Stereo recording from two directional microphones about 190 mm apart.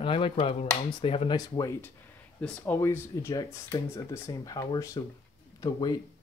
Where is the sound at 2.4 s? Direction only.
10° left (ahead or behind).